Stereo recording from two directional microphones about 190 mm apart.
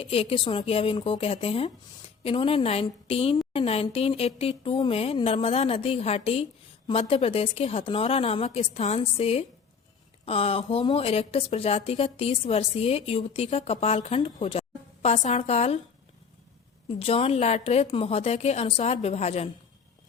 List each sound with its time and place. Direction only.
0.0 s speech: 30° left (ahead or behind)
17.0 s speech: 30° left (ahead or behind)